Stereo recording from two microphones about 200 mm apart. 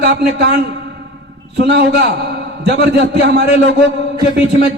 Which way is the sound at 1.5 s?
55° right (ahead or behind).